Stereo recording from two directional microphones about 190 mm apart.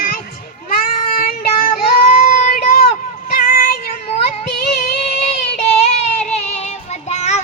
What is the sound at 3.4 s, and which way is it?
Music, 50° left (ahead or behind).